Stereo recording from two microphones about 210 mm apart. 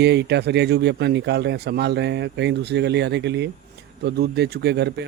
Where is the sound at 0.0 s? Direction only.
55° right (ahead or behind).